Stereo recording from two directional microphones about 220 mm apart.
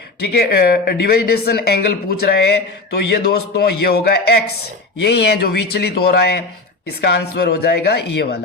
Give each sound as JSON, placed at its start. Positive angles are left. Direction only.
{"t": 0.3, "sound": "speech", "side_deg": 45}